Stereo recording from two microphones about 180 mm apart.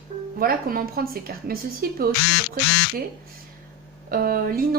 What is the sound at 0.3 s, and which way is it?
Speech, 55° right (ahead or behind).